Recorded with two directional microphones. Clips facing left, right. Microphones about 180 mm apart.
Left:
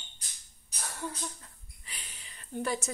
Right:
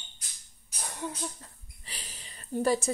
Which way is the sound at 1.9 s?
35° right (ahead or behind).